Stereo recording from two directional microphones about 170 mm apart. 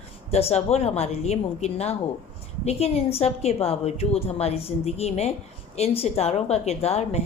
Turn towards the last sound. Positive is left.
turn(degrees=40)  # may be behind; listen again after turning